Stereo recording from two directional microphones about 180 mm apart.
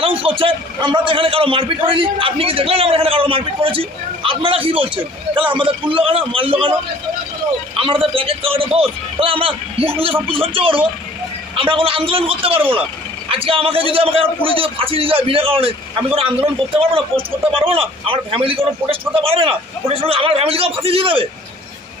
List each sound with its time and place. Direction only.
0.0 s a man's voice: 30° right (ahead or behind)
7.7 s a man's voice: 30° right (ahead or behind)